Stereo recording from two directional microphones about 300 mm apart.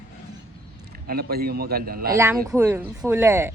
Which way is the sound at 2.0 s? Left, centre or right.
Centre.